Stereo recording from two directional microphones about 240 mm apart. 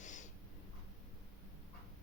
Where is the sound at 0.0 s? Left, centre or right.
Left.